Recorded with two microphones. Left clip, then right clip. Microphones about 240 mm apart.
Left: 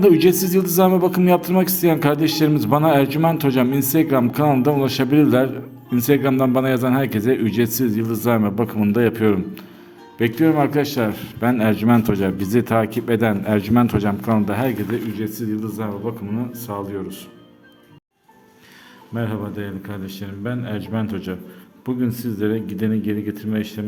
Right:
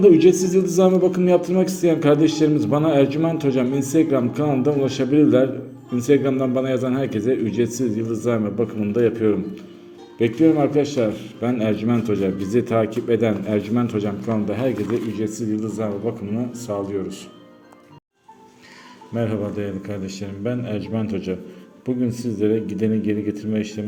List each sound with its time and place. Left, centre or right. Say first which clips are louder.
0.0 s a man's voice: right 1 dB; left; by 17.2 s centre
19.1 s a man's voice: right 3 dB; centre